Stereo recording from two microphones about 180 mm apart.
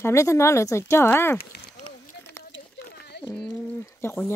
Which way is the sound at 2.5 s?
80° left.